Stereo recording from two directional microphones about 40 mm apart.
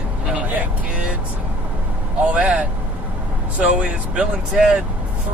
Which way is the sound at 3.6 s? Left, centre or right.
Right.